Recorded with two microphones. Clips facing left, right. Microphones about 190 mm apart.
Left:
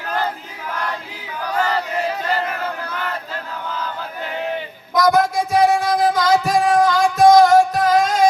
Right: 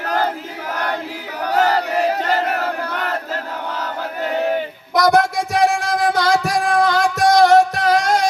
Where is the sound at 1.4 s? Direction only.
70° right (ahead or behind).